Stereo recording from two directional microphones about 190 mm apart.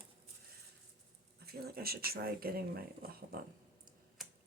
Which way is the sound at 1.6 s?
55° right (ahead or behind).